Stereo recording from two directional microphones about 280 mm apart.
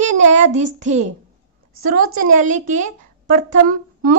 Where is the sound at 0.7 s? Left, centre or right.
Right.